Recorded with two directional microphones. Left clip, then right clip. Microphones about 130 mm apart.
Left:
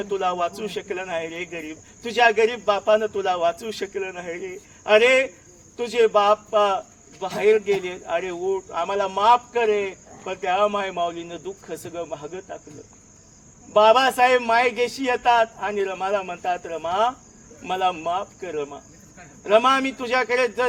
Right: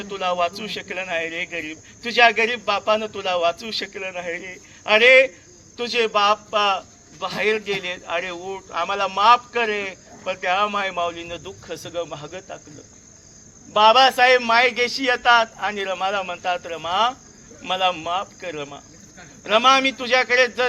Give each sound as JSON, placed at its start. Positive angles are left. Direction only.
{"t": 0.0, "sound": "speech", "side_deg": 50}
{"t": 3.9, "sound": "speech", "side_deg": 40}
{"t": 7.2, "sound": "speech", "side_deg": 45}
{"t": 13.8, "sound": "a man's voice", "side_deg": 55}